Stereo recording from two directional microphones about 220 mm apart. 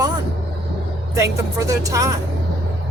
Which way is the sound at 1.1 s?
15° right (ahead or behind).